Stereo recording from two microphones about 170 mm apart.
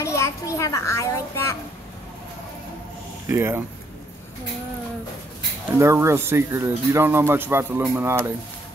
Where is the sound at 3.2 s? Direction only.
15° right (ahead or behind).